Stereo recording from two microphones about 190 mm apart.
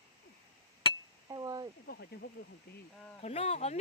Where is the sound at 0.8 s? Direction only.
25° left (ahead or behind).